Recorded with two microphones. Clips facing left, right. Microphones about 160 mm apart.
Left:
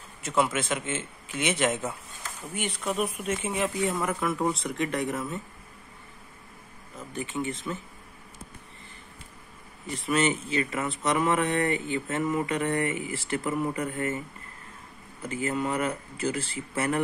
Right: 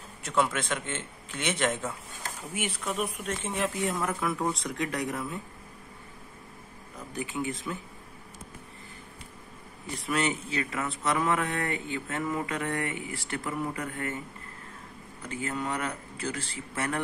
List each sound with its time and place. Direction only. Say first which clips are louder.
0.2 s speech: left 2 dB; 5° left (ahead or behind)
2.9 s speech: left 5 dB; 5° left (ahead or behind)
7.2 s speech: left 1 dB; centre (ahead or behind)
9.9 s speech: left 4 dB; centre (ahead or behind)
15.2 s speech: left 4 dB; 5° left (ahead or behind)